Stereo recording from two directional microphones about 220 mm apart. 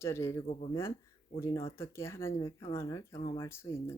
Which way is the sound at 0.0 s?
10° left (ahead or behind).